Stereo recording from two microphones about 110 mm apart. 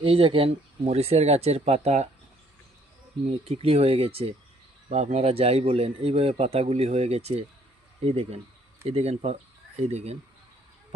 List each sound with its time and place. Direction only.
0.0 s a man's voice: 55° right (ahead or behind); by 2.0 s 85° right
3.4 s a man's voice: 60° right (ahead or behind)
9.9 s speech: 80° right